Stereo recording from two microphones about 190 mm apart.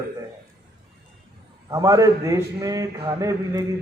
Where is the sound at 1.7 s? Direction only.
15° right (ahead or behind).